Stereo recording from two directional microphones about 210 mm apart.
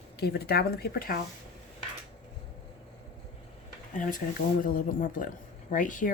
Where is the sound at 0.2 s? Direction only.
50° left (ahead or behind).